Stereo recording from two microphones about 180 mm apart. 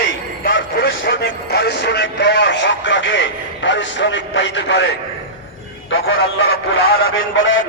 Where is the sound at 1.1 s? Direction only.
65° left (ahead or behind); by 4.9 s 85° left.